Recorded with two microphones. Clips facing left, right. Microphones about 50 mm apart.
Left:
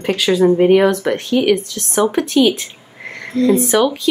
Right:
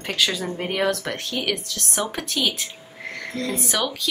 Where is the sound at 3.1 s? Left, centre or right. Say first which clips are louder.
Left 13 dB; centre.